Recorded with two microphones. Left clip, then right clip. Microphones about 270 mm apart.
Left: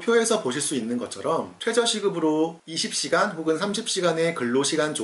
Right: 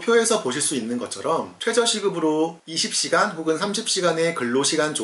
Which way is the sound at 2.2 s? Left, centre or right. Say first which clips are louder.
Right 1 dB; left.